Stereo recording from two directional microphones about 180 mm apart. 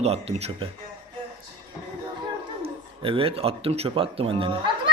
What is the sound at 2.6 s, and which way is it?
A man's voice, 30° right (ahead or behind).